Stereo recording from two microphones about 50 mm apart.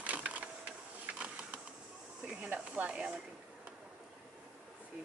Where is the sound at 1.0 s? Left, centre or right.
Right.